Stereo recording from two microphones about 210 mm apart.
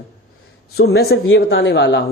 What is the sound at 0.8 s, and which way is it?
A woman's voice, 50° left (ahead or behind).